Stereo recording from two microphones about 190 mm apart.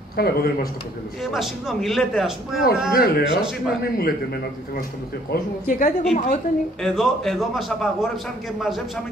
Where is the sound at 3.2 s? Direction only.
5° right (ahead or behind).